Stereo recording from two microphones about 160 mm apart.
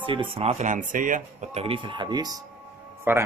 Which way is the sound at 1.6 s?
30° right (ahead or behind).